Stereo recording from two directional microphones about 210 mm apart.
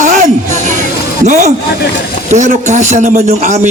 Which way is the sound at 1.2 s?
35° right (ahead or behind).